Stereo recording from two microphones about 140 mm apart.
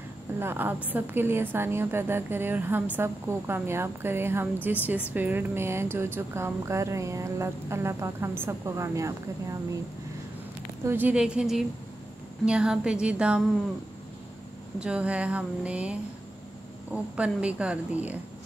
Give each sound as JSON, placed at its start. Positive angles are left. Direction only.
{"t": 0.4, "sound": "a woman's voice", "side_deg": -15}
{"t": 10.9, "sound": "a woman's voice", "side_deg": -10}
{"t": 14.8, "sound": "a woman's voice", "side_deg": -10}